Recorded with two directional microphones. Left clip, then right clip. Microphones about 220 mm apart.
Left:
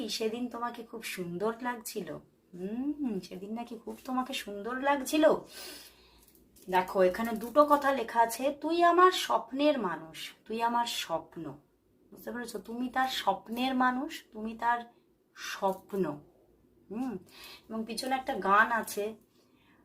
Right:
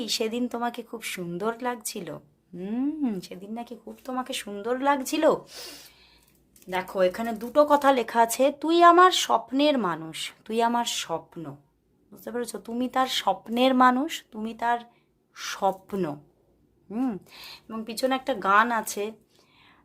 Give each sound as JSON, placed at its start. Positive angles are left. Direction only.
{"t": 0.0, "sound": "speech", "side_deg": -50}
{"t": 4.6, "sound": "speech", "side_deg": -50}
{"t": 6.7, "sound": "speech", "side_deg": -35}
{"t": 17.9, "sound": "speech", "side_deg": -50}